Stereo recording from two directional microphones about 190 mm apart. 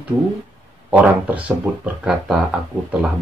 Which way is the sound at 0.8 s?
5° right (ahead or behind).